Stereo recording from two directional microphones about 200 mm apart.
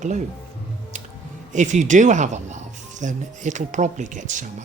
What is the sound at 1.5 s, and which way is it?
Speech, 35° right (ahead or behind).